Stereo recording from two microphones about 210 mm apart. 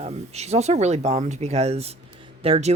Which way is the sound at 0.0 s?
30° right (ahead or behind).